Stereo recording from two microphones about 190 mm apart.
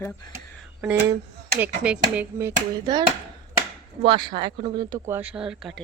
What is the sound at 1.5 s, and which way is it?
Speech, 10° right (ahead or behind).